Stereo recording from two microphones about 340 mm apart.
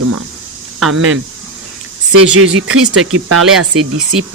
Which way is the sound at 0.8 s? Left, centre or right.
Right.